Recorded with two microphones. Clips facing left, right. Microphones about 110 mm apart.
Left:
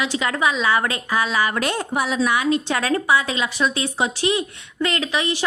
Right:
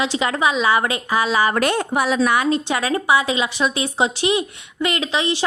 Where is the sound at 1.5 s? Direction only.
60° right (ahead or behind).